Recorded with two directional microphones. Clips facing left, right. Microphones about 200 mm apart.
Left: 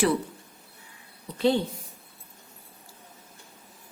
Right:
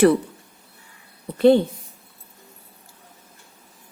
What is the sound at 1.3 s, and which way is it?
Speech, 55° right (ahead or behind).